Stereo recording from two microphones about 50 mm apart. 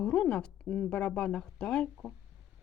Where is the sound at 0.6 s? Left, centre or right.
Centre.